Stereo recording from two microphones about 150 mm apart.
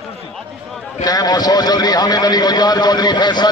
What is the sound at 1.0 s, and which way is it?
A man's voice, 25° left (ahead or behind).